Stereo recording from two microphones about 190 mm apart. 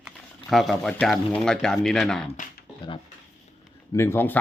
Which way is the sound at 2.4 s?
40° left (ahead or behind).